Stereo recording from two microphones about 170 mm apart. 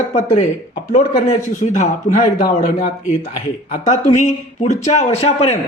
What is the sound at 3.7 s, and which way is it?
Speech, 45° left (ahead or behind).